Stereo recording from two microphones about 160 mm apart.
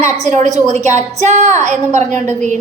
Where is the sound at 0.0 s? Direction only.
50° right (ahead or behind).